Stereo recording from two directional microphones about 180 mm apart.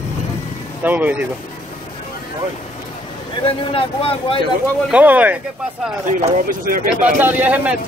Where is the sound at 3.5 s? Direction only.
30° left (ahead or behind).